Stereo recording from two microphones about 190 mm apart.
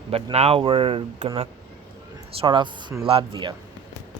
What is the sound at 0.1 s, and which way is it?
Speech, 30° right (ahead or behind).